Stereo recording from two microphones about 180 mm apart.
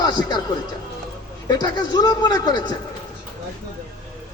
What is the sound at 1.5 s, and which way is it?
A man's voice, 20° left (ahead or behind).